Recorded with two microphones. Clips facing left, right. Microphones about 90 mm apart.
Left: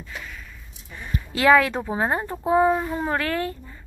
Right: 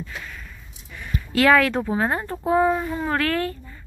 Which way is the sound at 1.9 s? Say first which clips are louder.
Right 1 dB; 20° left (ahead or behind).